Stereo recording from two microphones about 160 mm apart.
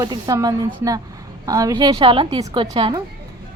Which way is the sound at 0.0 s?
25° right (ahead or behind).